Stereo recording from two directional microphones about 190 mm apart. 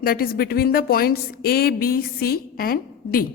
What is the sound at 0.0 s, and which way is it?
A woman's voice, 50° left (ahead or behind).